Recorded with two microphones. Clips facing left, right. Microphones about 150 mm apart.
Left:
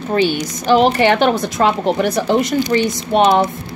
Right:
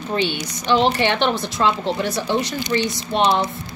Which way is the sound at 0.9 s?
45° left (ahead or behind).